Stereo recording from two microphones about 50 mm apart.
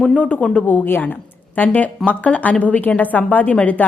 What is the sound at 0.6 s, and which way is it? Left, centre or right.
A woman's voice, left.